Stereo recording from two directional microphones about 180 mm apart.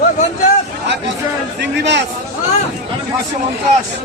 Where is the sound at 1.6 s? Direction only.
70° right (ahead or behind).